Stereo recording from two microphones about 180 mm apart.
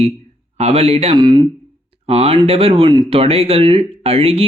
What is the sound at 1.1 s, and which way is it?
Speech, 25° right (ahead or behind).